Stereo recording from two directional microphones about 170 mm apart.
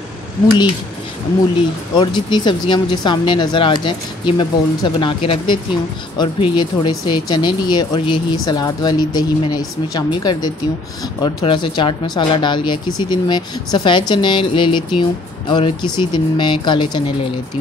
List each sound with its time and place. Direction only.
2.0 s speech: 25° left (ahead or behind)